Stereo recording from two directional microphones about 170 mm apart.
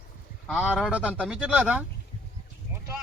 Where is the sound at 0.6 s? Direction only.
5° right (ahead or behind).